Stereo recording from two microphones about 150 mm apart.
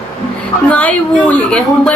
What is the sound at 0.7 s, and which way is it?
A woman's voice, 10° left (ahead or behind).